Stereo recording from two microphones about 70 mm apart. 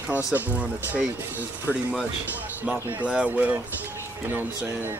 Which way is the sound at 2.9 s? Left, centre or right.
Centre.